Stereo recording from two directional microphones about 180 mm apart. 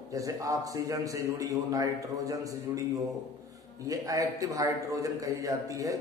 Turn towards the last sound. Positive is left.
turn(degrees=-20)  # may be behind; listen again after turning